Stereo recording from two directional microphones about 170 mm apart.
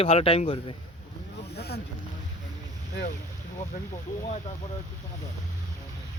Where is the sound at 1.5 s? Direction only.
75° left (ahead or behind).